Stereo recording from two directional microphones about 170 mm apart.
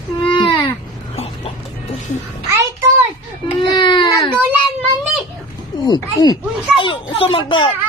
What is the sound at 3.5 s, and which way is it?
Speech, 30° left (ahead or behind).